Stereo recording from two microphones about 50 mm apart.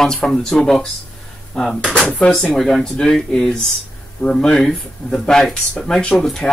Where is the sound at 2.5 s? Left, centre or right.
Centre.